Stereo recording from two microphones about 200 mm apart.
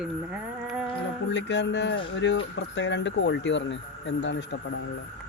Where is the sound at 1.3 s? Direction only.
60° left (ahead or behind).